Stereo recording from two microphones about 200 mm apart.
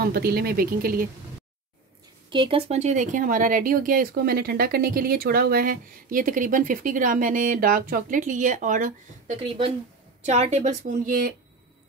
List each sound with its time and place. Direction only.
0.0 s speech: 50° right (ahead or behind)
2.2 s speech: 25° right (ahead or behind); by 11.3 s 45° right (ahead or behind)